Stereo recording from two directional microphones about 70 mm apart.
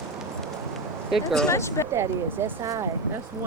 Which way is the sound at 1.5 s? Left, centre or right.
Left.